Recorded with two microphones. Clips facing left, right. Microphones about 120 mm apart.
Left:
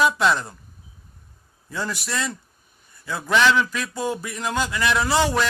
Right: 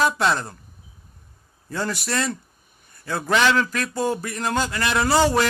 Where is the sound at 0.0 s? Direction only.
40° right (ahead or behind).